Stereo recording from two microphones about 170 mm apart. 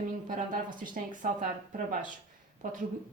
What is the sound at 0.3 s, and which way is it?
Speech, 50° right (ahead or behind).